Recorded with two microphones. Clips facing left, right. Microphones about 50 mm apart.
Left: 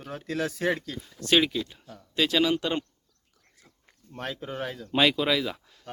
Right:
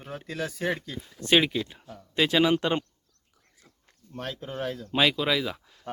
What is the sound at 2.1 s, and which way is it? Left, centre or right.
Speech, centre.